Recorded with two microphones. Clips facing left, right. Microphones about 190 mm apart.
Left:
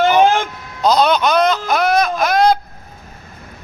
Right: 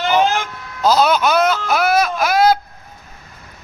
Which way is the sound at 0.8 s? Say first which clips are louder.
Left 1 dB; 5° right (ahead or behind).